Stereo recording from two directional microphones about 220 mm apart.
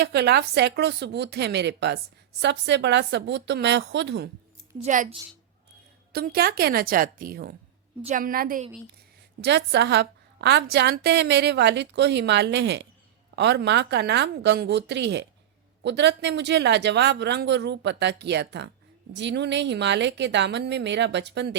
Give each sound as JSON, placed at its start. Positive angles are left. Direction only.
{"t": 0.0, "sound": "a woman's voice", "side_deg": -50}
{"t": 4.8, "sound": "a woman's voice", "side_deg": -35}
{"t": 6.1, "sound": "a woman's voice", "side_deg": -45}
{"t": 9.4, "sound": "a woman's voice", "side_deg": -50}